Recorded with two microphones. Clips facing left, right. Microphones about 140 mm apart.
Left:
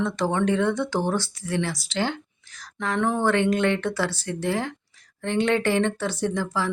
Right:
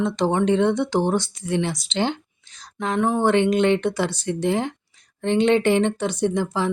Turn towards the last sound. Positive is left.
turn(degrees=-20)  # may be behind; listen again after turning